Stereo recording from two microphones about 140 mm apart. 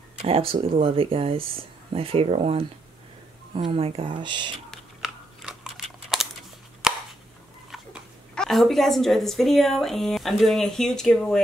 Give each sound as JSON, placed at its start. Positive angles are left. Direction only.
{"t": 0.2, "sound": "speech", "side_deg": -40}
{"t": 4.6, "sound": "a sound", "side_deg": -5}
{"t": 7.7, "sound": "speech", "side_deg": 0}